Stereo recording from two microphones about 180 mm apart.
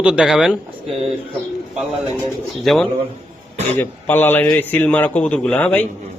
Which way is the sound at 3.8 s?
10° left (ahead or behind).